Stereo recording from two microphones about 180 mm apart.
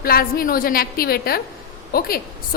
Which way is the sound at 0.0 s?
55° left (ahead or behind).